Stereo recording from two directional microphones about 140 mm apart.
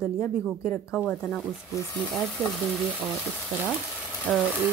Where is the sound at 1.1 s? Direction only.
10° left (ahead or behind).